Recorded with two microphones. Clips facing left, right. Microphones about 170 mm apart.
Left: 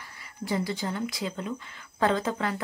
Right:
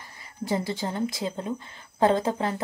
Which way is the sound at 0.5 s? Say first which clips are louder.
Right 1 dB; 25° right (ahead or behind).